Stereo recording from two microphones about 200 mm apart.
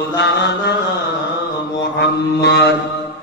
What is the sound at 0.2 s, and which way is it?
Mantra, 60° left (ahead or behind).